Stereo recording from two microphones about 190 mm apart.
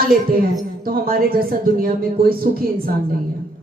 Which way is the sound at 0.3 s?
50° right (ahead or behind).